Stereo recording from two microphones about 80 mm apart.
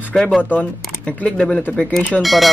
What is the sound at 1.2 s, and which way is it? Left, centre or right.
A man's voice, centre.